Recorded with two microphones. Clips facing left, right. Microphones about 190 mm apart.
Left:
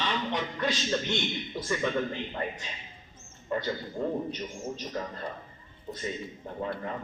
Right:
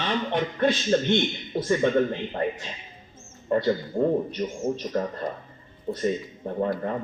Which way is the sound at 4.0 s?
45° right (ahead or behind).